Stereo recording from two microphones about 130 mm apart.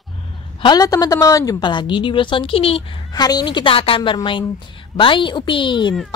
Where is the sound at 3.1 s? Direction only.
30° left (ahead or behind).